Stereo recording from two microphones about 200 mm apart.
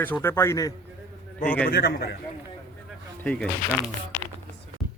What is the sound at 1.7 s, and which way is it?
Speech, 50° left (ahead or behind).